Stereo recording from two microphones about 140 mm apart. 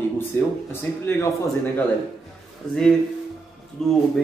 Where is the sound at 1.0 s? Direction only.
15° left (ahead or behind).